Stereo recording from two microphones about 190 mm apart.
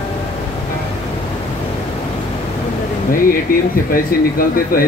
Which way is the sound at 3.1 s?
45° left (ahead or behind).